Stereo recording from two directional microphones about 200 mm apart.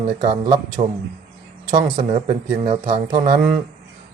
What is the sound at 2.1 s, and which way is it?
Speech, 35° right (ahead or behind).